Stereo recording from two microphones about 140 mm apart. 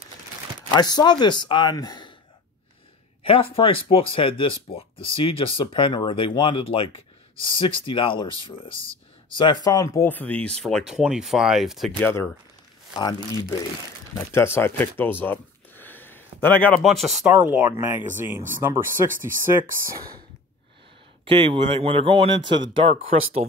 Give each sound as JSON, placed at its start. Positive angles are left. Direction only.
{"t": 0.7, "sound": "speech", "side_deg": 30}
{"t": 3.3, "sound": "speech", "side_deg": 40}
{"t": 10.0, "sound": "speech", "side_deg": 10}
{"t": 12.0, "sound": "speech", "side_deg": 20}
{"t": 12.9, "sound": "speech", "side_deg": 30}
{"t": 14.1, "sound": "speech", "side_deg": 15}
{"t": 16.7, "sound": "speech", "side_deg": 0}
{"t": 17.5, "sound": "speech", "side_deg": -20}
{"t": 21.3, "sound": "speech", "side_deg": -40}